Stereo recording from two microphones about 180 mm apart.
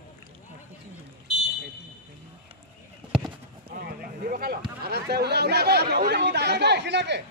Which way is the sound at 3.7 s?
55° right (ahead or behind).